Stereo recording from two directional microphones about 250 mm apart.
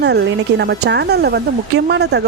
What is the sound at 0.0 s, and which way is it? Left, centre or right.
A woman's voice, right.